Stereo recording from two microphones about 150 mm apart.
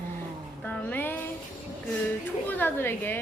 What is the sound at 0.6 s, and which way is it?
Music, 10° left (ahead or behind).